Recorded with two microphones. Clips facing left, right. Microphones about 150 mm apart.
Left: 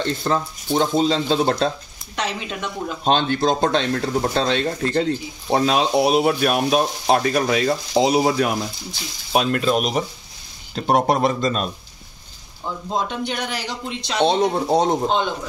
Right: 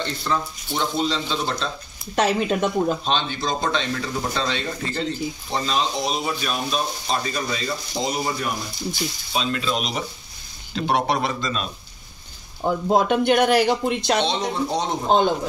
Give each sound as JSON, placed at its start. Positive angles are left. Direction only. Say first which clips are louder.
{"t": 0.3, "sound": "speech", "louder": "left 3 dB", "side_deg": 45}
{"t": 2.1, "sound": "speech", "louder": "right 7 dB", "side_deg": -45}
{"t": 3.0, "sound": "speech", "louder": "left 6 dB", "side_deg": 50}
{"t": 9.3, "sound": "speech", "louder": "left 7 dB", "side_deg": 55}
{"t": 12.6, "sound": "speech", "louder": "right 6 dB", "side_deg": -60}
{"t": 14.2, "sound": "speech", "louder": "left 6 dB", "side_deg": 55}
{"t": 15.0, "sound": "a man's voice", "louder": "right 3 dB", "side_deg": -40}